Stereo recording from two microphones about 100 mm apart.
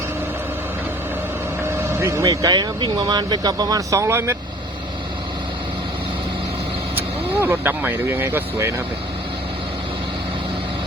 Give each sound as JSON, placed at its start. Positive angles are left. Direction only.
{"t": 1.7, "sound": "speech", "side_deg": -25}
{"t": 7.4, "sound": "speech", "side_deg": -20}